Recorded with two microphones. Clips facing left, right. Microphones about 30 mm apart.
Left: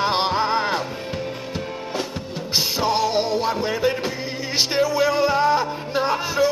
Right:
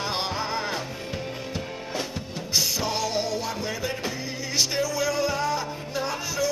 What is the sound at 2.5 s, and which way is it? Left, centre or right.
Music, left.